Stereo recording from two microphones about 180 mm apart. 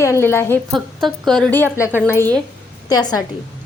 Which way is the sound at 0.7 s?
Centre (ahead or behind).